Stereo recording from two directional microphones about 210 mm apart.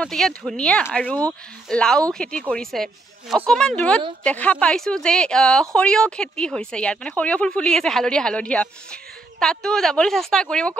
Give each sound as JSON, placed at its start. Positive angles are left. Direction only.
{"t": 0.0, "sound": "a woman's voice", "side_deg": 0}